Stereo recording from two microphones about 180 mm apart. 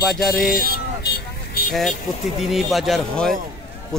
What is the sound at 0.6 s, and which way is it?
Vehicle, 60° left (ahead or behind).